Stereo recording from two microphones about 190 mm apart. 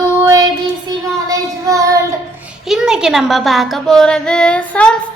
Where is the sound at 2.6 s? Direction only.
5° right (ahead or behind).